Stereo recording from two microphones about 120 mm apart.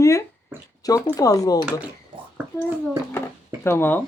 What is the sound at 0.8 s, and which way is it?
Speech, 30° left (ahead or behind).